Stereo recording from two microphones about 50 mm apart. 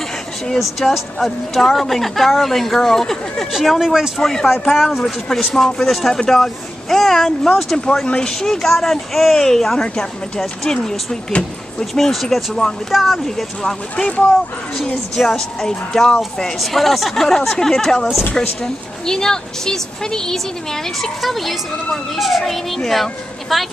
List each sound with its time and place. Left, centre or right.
0.6 s speech: centre
3.8 s speech: centre
4.2 s speech: centre
13.6 s speech: centre
14.0 s speech: left
15.3 s speech: centre
16.5 s speech: centre